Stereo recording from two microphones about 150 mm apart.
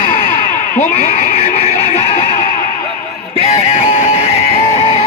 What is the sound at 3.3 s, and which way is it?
Music, 45° left (ahead or behind).